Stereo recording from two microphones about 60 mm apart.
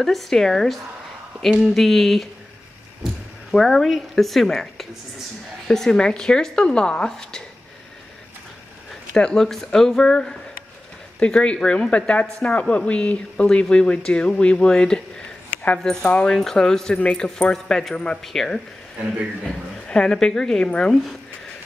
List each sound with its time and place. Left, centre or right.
0.0 s a woman's voice: centre
3.5 s a woman's voice: centre
9.1 s a woman's voice: centre
18.9 s a man's voice: centre
19.4 s a woman's voice: centre